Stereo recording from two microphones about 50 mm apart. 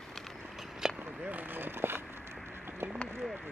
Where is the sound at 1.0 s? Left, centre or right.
Right.